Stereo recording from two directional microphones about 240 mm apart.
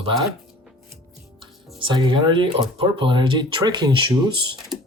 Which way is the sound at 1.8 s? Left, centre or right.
Centre.